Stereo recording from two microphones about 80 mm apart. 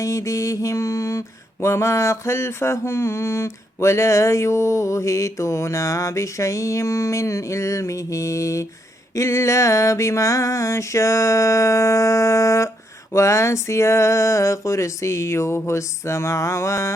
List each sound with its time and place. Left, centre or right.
0.0 s mantra: left